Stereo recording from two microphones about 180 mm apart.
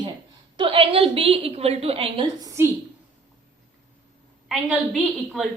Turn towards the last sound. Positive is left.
turn(degrees=0)  # may be behind; listen again after turning